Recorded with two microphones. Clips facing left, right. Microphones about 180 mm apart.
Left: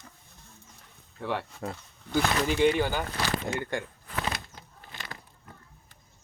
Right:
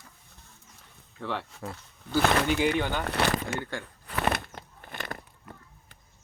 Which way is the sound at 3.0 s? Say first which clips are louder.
Right 5 dB; 65° right (ahead or behind).